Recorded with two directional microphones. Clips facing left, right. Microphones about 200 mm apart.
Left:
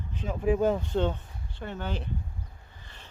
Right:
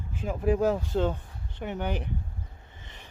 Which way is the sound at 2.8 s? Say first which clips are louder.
Right 2 dB; 20° right (ahead or behind).